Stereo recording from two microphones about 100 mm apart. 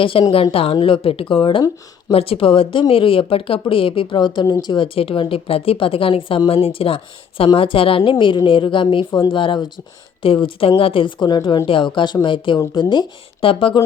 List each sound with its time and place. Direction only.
0.0 s speech: 60° left (ahead or behind)
2.1 s speech: 70° left (ahead or behind); by 4.9 s 45° left (ahead or behind)
4.9 s speech: 65° left (ahead or behind); by 9.8 s 45° left (ahead or behind)
10.2 s speech: 65° left (ahead or behind)
11.2 s speech: 45° left (ahead or behind)
11.6 s speech: 55° left (ahead or behind)
13.4 s speech: 65° left (ahead or behind)